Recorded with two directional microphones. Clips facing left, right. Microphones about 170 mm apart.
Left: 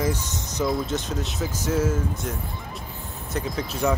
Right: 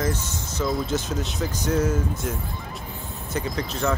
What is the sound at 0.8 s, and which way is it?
Speech, centre (ahead or behind).